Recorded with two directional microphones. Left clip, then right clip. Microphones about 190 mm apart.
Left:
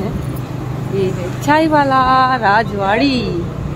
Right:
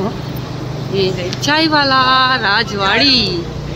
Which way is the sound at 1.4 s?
20° left (ahead or behind).